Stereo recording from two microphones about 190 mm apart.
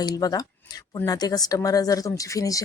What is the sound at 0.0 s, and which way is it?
Speech, 20° left (ahead or behind).